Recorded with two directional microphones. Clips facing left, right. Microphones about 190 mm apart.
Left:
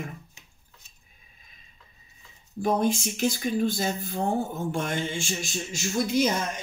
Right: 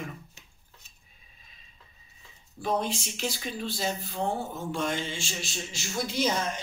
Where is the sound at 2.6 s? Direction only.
50° left (ahead or behind).